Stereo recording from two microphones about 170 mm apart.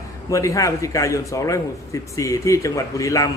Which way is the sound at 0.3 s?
20° left (ahead or behind).